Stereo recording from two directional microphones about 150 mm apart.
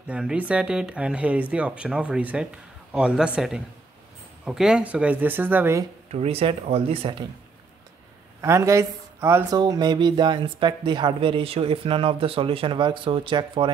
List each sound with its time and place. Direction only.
0.1 s a man's voice: 5° right (ahead or behind)
6.1 s speech: 40° right (ahead or behind)
8.4 s speech: 20° right (ahead or behind)
9.6 s speech: 25° right (ahead or behind)